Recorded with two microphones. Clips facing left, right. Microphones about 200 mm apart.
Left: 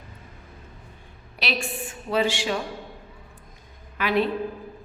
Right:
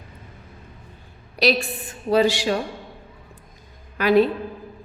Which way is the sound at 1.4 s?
40° right (ahead or behind).